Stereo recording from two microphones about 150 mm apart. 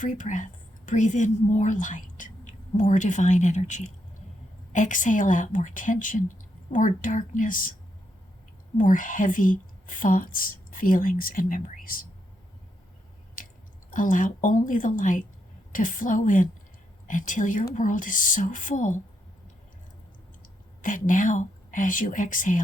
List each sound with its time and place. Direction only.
0.0 s a woman's voice: 55° left (ahead or behind)
8.8 s a woman's voice: 60° left (ahead or behind)
13.9 s a woman's voice: 65° left (ahead or behind)
20.8 s a woman's voice: 60° left (ahead or behind)